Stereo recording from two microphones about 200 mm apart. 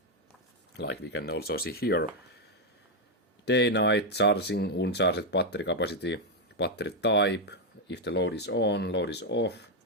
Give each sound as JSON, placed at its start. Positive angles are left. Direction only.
{"t": 0.7, "sound": "speech", "side_deg": 55}
{"t": 3.4, "sound": "speech", "side_deg": 60}